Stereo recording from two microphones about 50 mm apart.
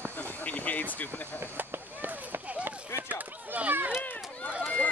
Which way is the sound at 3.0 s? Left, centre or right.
Right.